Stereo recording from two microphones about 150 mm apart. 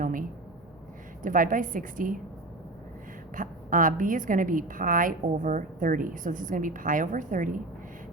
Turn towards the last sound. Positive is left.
turn(degrees=-60)  # may be behind; listen again after turning